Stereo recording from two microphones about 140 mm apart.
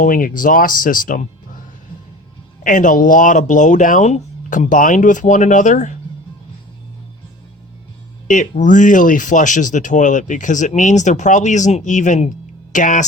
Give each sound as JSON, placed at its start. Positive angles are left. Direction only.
{"t": 0.0, "sound": "speech", "side_deg": 85}
{"t": 2.6, "sound": "speech", "side_deg": 70}
{"t": 8.3, "sound": "speech", "side_deg": 65}